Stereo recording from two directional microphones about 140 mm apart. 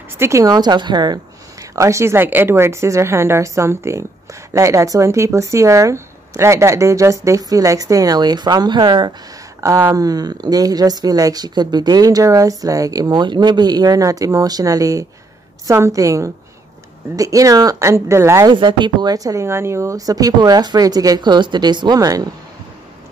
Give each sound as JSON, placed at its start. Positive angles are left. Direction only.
{"t": 0.2, "sound": "a woman's voice", "side_deg": -20}
{"t": 9.6, "sound": "a woman's voice", "side_deg": -20}
{"t": 18.5, "sound": "a woman's voice", "side_deg": -35}